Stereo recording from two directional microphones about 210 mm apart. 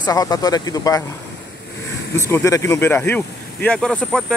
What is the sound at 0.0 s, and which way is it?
Speech, 15° left (ahead or behind).